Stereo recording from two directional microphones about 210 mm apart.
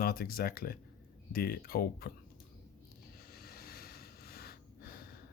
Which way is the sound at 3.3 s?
45° left (ahead or behind).